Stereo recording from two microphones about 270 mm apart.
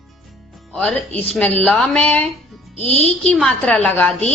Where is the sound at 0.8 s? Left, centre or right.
Centre.